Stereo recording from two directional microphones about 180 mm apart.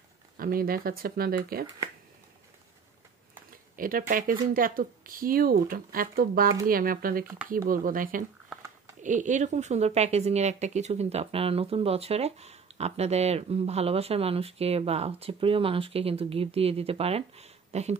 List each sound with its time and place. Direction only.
0.4 s speech: 55° right (ahead or behind)
3.7 s a woman's voice: 50° right (ahead or behind)